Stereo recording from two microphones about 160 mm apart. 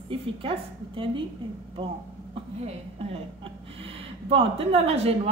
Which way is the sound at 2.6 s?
40° right (ahead or behind).